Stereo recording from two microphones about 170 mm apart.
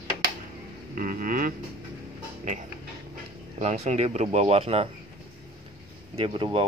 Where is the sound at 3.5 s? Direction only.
40° right (ahead or behind).